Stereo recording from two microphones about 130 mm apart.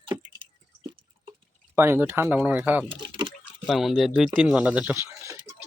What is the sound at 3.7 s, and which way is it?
Speech, centre (ahead or behind).